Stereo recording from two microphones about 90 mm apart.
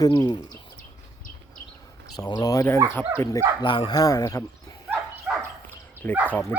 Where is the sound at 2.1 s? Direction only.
45° left (ahead or behind).